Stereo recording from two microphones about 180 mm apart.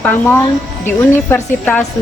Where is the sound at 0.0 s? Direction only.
10° left (ahead or behind).